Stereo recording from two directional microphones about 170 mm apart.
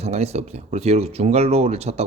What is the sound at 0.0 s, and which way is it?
Speech, 40° right (ahead or behind).